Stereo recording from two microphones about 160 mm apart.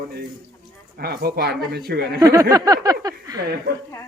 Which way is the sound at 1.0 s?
75° right (ahead or behind).